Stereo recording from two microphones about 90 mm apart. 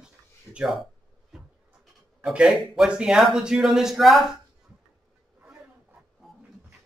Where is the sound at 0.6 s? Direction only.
Centre (ahead or behind).